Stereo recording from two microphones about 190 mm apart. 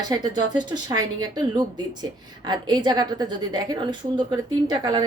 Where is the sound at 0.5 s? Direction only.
25° right (ahead or behind).